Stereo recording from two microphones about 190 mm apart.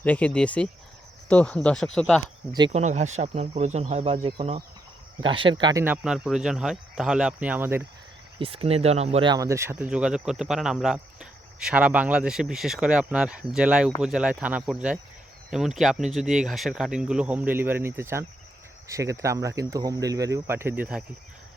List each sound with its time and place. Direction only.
0.0 s speech: 10° left (ahead or behind)
2.5 s speech: 25° right (ahead or behind)
2.7 s speech: 35° right (ahead or behind)
5.8 s speech: 5° right (ahead or behind)
8.4 s speech: 30° right (ahead or behind); by 21.0 s 5° right (ahead or behind)